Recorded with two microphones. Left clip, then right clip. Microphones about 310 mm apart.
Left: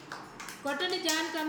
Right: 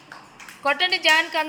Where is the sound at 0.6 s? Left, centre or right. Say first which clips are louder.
Right 12 dB; right.